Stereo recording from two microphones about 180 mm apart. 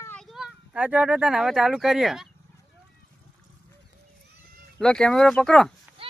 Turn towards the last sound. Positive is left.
turn(degrees=-30)  # may be behind; listen again after turning